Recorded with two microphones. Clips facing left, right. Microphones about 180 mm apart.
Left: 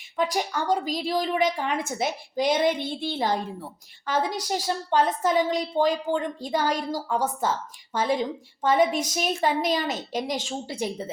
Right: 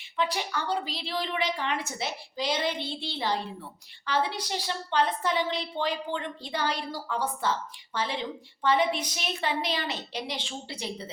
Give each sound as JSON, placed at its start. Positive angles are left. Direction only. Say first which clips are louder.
{"t": 0.2, "sound": "a woman's voice", "louder": "left 4 dB", "side_deg": 45}